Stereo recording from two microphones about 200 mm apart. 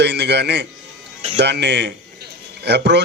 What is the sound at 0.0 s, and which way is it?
Speech, 55° right (ahead or behind).